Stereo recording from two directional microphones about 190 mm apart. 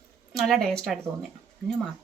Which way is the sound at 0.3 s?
Centre (ahead or behind).